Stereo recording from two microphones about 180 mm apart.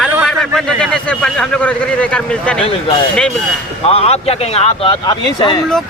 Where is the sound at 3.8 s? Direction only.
35° left (ahead or behind).